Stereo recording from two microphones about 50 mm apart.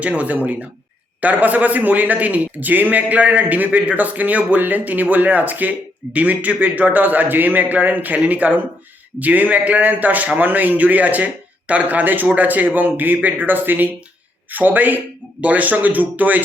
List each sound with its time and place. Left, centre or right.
0.0 s a man's voice: right